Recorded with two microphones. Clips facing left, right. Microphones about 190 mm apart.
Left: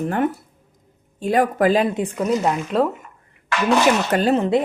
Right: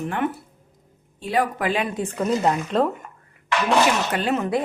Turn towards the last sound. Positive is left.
turn(degrees=25)  # may be behind; listen again after turning